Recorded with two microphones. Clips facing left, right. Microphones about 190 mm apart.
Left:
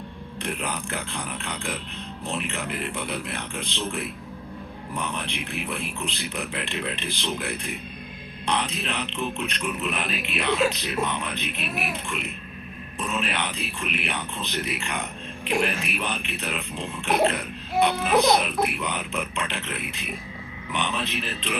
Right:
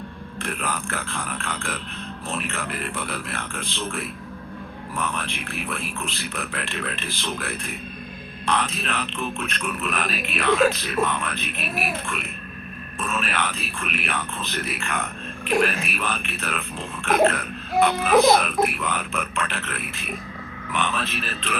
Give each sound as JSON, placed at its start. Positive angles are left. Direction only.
{"t": 0.4, "sound": "speech", "side_deg": 20}